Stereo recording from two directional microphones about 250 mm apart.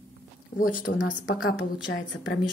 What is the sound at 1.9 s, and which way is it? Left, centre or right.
Speech, left.